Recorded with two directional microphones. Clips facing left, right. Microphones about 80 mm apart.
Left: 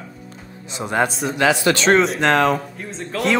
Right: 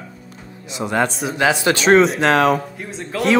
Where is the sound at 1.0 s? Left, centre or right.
Centre.